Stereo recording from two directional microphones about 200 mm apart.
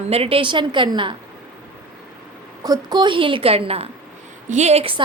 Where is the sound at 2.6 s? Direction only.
20° right (ahead or behind).